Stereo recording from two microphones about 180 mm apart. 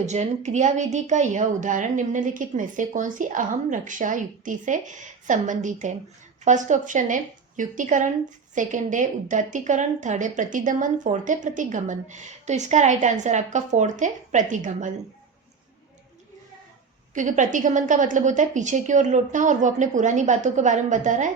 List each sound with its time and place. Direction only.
0.0 s a woman's voice: 40° right (ahead or behind)
17.2 s a woman's voice: 45° right (ahead or behind)